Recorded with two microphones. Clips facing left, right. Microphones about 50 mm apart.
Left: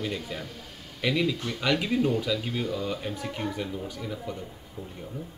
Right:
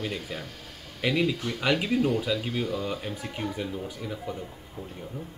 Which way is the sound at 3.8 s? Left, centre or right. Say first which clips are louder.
Even; centre.